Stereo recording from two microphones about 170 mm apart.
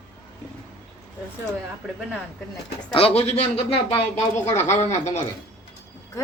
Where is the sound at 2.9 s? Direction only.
35° left (ahead or behind).